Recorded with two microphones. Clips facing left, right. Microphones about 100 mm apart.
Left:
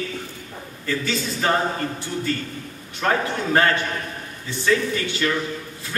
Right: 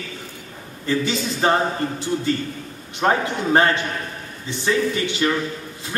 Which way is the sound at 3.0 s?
25° right (ahead or behind).